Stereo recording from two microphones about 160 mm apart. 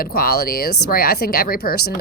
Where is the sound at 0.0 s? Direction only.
70° left (ahead or behind).